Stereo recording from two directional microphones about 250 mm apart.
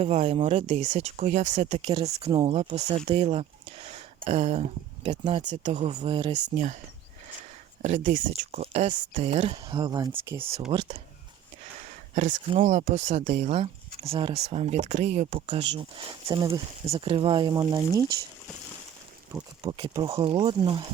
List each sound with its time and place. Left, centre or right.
0.0 s speech: right
7.8 s speech: right; by 10.4 s centre
10.7 s speech: right
12.1 s speech: right
19.3 s speech: centre